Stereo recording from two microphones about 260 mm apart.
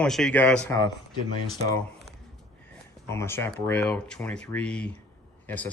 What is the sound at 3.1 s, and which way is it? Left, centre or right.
Speech, centre.